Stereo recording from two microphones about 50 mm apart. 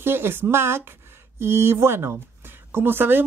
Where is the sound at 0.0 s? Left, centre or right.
Right.